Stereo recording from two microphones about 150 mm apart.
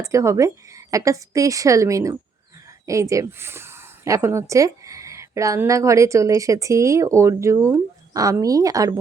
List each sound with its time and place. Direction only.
0.0 s speech: 20° right (ahead or behind)